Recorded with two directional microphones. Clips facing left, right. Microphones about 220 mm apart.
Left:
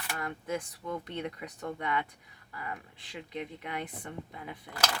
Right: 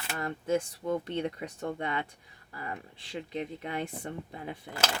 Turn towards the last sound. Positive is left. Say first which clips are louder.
# right 3 dB
turn(degrees=-25)  # may be behind; listen again after turning